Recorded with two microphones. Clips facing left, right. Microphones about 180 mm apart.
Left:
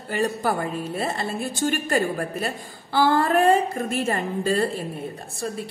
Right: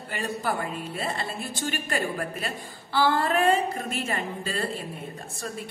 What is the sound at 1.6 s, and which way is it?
A woman's voice, 40° left (ahead or behind).